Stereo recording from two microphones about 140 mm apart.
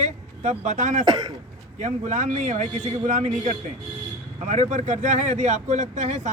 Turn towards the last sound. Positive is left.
turn(degrees=-60)  # may be behind; listen again after turning